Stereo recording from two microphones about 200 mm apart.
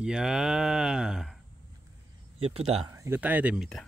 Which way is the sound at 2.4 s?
30° right (ahead or behind).